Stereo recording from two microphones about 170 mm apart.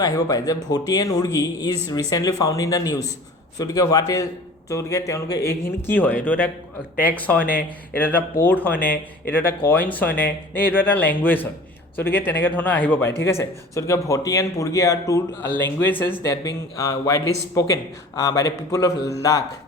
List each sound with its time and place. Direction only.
0.0 s a man's voice: 20° left (ahead or behind)